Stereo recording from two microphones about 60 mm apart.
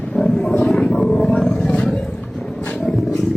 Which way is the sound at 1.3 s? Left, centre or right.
Left.